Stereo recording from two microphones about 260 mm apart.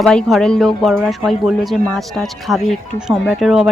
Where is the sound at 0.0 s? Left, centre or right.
Centre.